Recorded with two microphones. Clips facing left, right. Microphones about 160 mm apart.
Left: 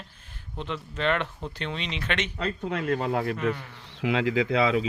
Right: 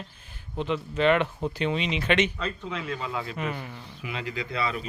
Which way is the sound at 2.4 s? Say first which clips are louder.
Left 3 dB; 60° left (ahead or behind).